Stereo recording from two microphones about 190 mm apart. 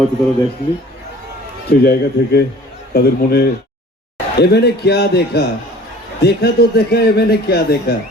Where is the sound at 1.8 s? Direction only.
55° left (ahead or behind).